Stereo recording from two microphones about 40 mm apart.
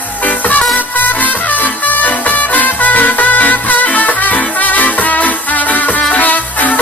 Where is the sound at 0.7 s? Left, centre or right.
Left.